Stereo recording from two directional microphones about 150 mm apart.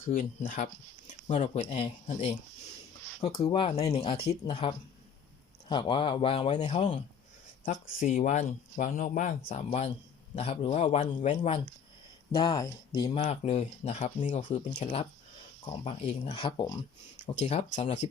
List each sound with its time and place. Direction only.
0.1 s speech: 65° left (ahead or behind)
3.2 s speech: 40° left (ahead or behind)
7.6 s speech: 60° left (ahead or behind)
9.5 s speech: 40° left (ahead or behind)
11.3 s speech: 35° left (ahead or behind)
13.1 s speech: 45° left (ahead or behind)
15.8 s speech: 40° left (ahead or behind)
17.2 s speech: 45° left (ahead or behind)